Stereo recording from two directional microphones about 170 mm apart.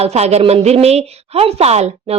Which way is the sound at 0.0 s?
40° right (ahead or behind).